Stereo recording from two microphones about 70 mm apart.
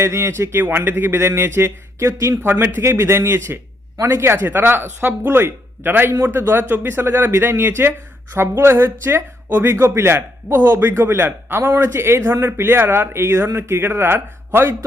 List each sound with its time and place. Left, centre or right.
0.0 s a man's voice: right
0.9 s a man's voice: right
2.0 s speech: right
2.4 s a man's voice: right